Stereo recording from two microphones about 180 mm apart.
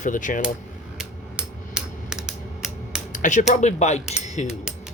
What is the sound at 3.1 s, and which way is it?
Speech, 45° left (ahead or behind).